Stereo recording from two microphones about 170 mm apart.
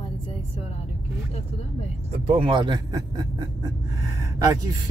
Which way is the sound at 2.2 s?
30° right (ahead or behind).